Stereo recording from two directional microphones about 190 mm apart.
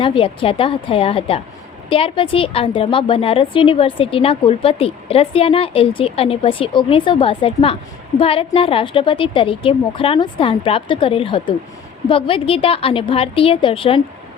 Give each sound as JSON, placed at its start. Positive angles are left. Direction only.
{"t": 0.0, "sound": "a woman's voice", "side_deg": 25}